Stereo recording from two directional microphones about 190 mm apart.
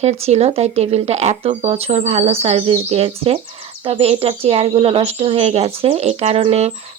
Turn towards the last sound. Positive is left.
turn(degrees=-35)  # may be behind; listen again after turning